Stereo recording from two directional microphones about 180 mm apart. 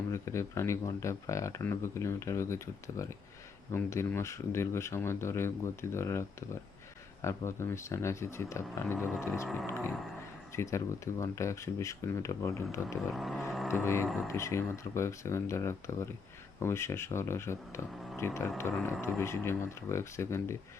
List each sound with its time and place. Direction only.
0.1 s speech: 15° left (ahead or behind)
13.0 s vehicle: centre (ahead or behind)
13.7 s speech: 15° left (ahead or behind)